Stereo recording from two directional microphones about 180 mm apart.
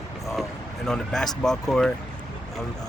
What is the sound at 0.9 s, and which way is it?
Speech, 5° left (ahead or behind).